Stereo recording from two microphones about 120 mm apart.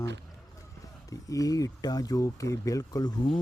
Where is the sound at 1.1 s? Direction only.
30° left (ahead or behind).